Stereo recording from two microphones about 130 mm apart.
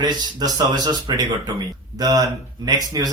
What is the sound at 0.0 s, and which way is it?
Speech, 35° right (ahead or behind).